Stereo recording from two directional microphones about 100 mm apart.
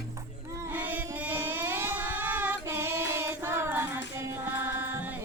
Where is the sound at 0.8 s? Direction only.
20° right (ahead or behind).